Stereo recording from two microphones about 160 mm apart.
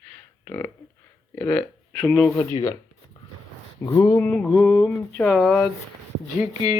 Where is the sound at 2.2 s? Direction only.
20° left (ahead or behind).